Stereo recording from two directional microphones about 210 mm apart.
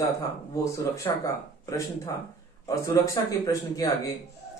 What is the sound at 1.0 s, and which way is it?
Speech, 15° left (ahead or behind).